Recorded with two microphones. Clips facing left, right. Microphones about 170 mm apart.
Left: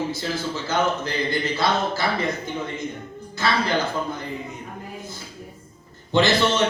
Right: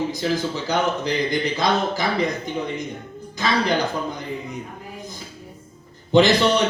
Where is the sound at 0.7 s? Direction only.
15° right (ahead or behind).